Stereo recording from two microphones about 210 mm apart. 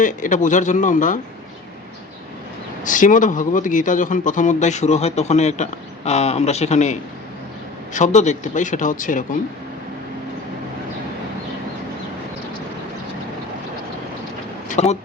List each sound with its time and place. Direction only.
0.0 s speech: 40° left (ahead or behind)
2.8 s speech: 40° left (ahead or behind)
7.9 s speech: 35° left (ahead or behind)
14.7 s vehicle: 30° left (ahead or behind)